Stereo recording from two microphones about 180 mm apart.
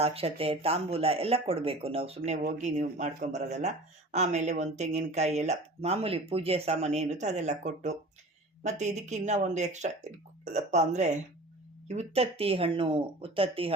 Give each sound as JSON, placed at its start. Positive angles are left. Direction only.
{"t": 0.0, "sound": "speech", "side_deg": -35}